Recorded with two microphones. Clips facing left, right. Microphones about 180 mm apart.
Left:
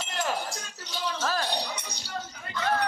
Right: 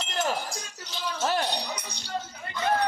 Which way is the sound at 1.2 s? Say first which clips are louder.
Right 4 dB; 25° right (ahead or behind).